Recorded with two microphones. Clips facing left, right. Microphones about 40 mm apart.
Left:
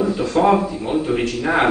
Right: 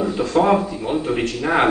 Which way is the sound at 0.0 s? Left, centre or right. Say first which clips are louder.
Left 1 dB; centre.